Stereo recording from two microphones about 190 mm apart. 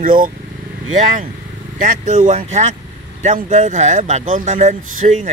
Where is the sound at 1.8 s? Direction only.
40° right (ahead or behind).